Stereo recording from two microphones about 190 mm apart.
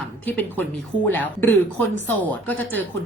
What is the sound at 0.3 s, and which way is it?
A woman's voice, 10° left (ahead or behind).